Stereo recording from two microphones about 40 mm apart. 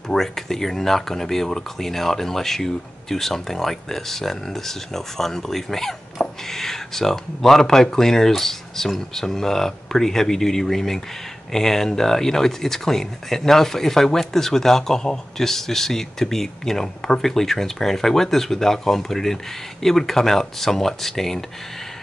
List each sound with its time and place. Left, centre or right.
0.1 s speech: centre
6.2 s a sound: left
6.5 s speech: centre